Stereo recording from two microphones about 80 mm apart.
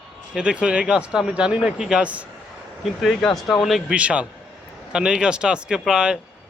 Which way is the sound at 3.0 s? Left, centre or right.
Centre.